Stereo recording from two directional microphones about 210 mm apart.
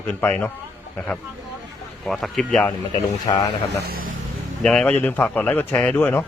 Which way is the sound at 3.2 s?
20° left (ahead or behind).